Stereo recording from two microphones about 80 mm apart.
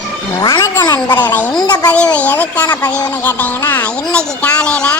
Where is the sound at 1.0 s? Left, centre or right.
Left.